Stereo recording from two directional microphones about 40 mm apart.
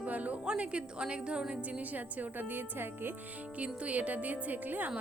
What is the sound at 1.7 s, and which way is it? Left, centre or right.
A woman's voice, right.